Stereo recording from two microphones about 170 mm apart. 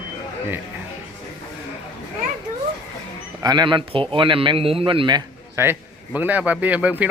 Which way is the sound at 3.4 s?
25° right (ahead or behind).